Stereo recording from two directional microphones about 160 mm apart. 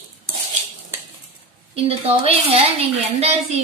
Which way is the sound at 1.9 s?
35° right (ahead or behind).